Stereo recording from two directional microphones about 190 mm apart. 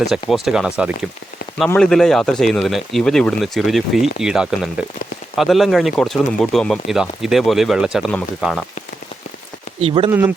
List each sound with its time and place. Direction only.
0.0 s speech: centre (ahead or behind)
9.8 s speech: 30° right (ahead or behind)
10.1 s speech: 10° right (ahead or behind)